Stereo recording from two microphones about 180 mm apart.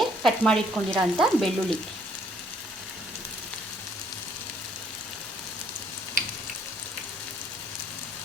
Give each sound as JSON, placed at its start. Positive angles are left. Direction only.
{"t": 0.0, "sound": "frying", "side_deg": 0}